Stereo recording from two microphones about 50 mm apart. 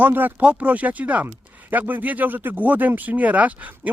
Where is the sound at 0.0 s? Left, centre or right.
Right.